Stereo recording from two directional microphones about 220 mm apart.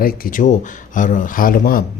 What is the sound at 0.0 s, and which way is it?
Speech, 35° left (ahead or behind).